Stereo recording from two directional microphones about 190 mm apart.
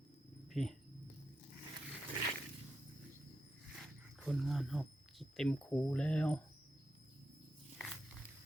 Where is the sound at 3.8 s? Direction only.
Centre (ahead or behind).